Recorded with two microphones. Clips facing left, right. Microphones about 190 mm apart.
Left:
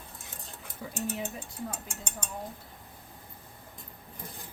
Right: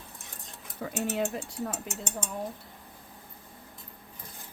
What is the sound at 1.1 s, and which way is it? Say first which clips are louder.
Speech: right 6 dB; 75° right (ahead or behind).